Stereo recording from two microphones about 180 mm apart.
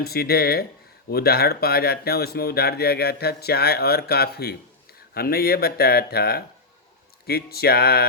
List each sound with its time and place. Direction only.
0.0 s speech: 60° left (ahead or behind)